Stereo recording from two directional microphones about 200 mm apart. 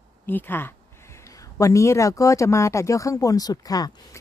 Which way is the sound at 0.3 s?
10° left (ahead or behind).